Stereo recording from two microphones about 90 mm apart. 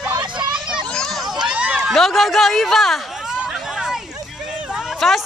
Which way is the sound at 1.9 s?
Centre (ahead or behind).